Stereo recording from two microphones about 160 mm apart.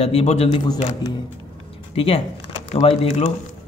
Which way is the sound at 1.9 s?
35° left (ahead or behind).